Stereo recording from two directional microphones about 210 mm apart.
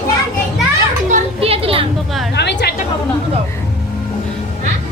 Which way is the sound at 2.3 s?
50° left (ahead or behind).